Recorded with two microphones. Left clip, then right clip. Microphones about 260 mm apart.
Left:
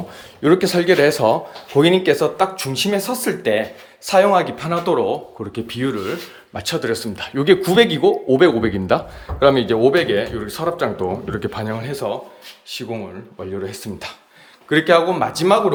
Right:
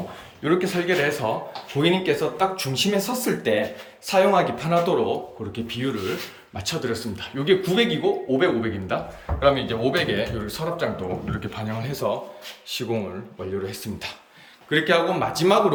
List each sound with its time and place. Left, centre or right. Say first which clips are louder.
0.4 s speech: left 8 dB; left
13.7 s speech: left 3 dB; centre